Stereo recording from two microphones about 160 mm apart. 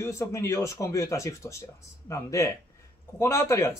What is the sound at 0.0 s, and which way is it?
Speech, 20° left (ahead or behind).